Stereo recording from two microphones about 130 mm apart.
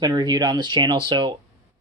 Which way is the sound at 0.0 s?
35° right (ahead or behind).